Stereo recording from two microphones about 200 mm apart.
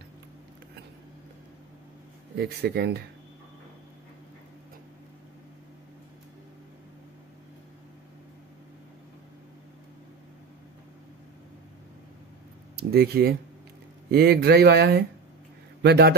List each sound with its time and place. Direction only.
2.3 s speech: 55° right (ahead or behind)
12.9 s speech: 50° right (ahead or behind)